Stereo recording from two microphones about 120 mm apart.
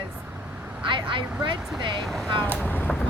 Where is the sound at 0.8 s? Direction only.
45° right (ahead or behind).